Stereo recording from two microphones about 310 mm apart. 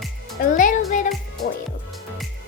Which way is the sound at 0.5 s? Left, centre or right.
Left.